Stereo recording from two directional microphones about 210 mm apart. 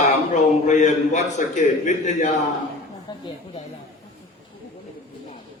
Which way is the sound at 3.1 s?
20° left (ahead or behind).